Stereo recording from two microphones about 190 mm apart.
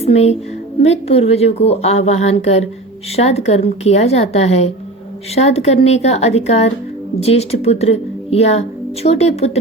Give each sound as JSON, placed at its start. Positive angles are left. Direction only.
{"t": 0.0, "sound": "a woman's voice", "side_deg": 35}